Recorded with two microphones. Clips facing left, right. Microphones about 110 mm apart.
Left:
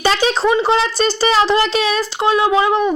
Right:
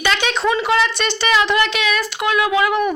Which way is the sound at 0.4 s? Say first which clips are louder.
Left 1 dB; 25° left (ahead or behind).